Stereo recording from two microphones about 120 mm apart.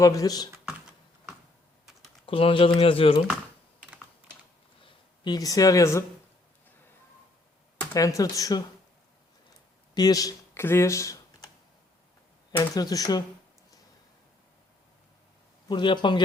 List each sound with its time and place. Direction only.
0.0 s speech: 30° left (ahead or behind)
2.2 s speech: 45° left (ahead or behind)
4.8 s speech: 45° left (ahead or behind); by 6.1 s 25° left (ahead or behind)
7.9 s speech: 30° left (ahead or behind)
9.9 s speech: 30° left (ahead or behind)
12.7 s speech: 30° left (ahead or behind)
15.7 s speech: 40° left (ahead or behind)